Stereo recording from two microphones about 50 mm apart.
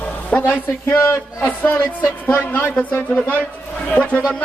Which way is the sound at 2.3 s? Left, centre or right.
Left.